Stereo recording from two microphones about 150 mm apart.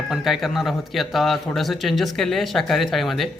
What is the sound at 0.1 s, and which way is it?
Speech, centre (ahead or behind).